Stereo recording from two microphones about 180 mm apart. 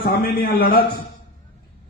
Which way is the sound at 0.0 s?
55° left (ahead or behind).